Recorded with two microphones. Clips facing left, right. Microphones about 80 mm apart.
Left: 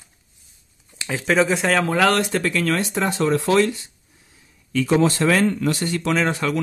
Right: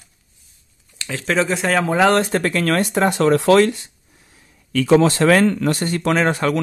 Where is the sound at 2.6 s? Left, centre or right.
Right.